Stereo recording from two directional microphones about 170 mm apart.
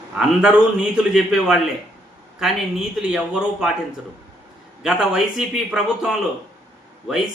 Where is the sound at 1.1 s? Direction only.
5° right (ahead or behind).